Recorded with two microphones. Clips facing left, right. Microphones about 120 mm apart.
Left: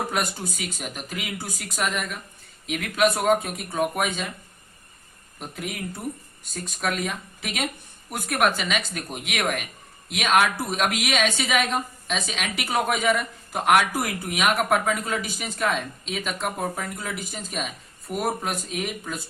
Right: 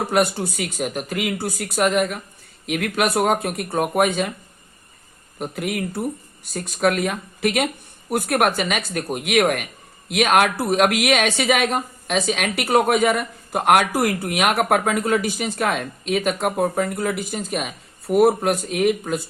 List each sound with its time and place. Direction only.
0.1 s a woman's voice: 60° right (ahead or behind)
5.4 s a woman's voice: 60° right (ahead or behind)